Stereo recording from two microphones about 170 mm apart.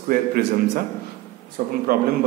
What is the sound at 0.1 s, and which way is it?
A man's voice, 60° right (ahead or behind).